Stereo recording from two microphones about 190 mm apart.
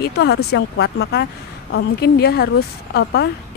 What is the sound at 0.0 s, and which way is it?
A woman's voice, 60° left (ahead or behind).